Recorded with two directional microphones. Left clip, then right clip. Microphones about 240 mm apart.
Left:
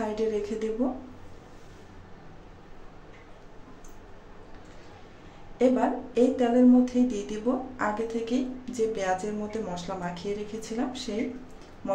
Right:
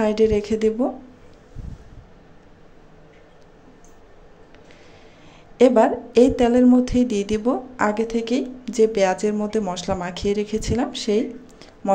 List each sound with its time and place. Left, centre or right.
0.0 s speech: right
5.6 s speech: right